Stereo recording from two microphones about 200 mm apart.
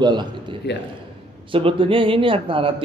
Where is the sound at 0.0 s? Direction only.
20° right (ahead or behind).